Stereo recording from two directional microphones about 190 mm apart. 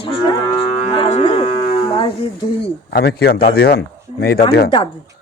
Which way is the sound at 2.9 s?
55° left (ahead or behind).